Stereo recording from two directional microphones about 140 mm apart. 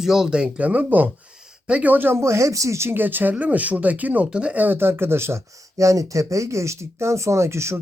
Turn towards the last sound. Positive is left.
turn(degrees=-20)  # may be behind; listen again after turning